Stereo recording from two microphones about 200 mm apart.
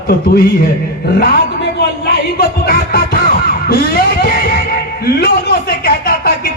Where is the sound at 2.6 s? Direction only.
50° left (ahead or behind).